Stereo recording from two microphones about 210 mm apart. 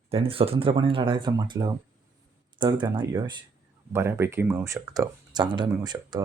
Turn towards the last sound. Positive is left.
turn(degrees=-20)  # may be behind; listen again after turning